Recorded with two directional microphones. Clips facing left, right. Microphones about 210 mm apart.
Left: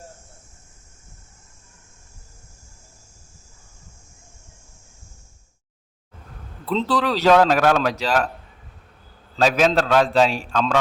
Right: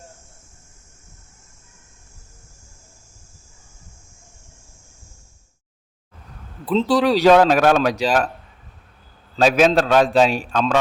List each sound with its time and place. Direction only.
6.7 s speech: 15° right (ahead or behind)
9.4 s speech: 15° right (ahead or behind)